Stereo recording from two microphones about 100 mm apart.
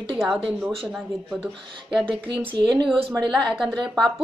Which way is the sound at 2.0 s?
60° right (ahead or behind).